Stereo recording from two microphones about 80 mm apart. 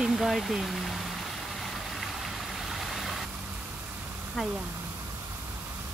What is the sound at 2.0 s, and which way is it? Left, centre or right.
Vehicle, centre.